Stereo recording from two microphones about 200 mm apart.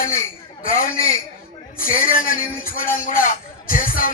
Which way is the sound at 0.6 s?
45° left (ahead or behind).